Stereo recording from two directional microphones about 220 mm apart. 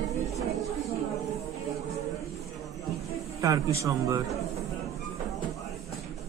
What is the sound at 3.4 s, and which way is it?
Speech, 15° right (ahead or behind).